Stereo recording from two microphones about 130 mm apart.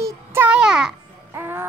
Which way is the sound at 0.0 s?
20° right (ahead or behind).